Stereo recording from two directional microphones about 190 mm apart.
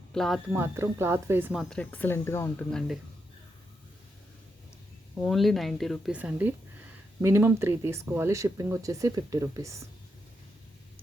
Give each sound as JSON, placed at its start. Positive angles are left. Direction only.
{"t": 0.1, "sound": "speech", "side_deg": 0}
{"t": 0.5, "sound": "speech", "side_deg": -15}
{"t": 1.7, "sound": "speech", "side_deg": 10}
{"t": 2.7, "sound": "speech", "side_deg": 0}
{"t": 5.2, "sound": "speech", "side_deg": 0}